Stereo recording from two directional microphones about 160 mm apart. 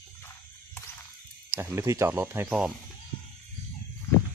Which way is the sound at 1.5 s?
15° right (ahead or behind).